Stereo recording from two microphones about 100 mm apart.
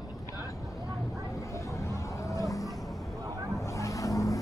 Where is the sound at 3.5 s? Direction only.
30° left (ahead or behind).